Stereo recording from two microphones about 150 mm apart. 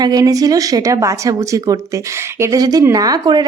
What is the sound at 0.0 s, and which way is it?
Speech, 25° right (ahead or behind).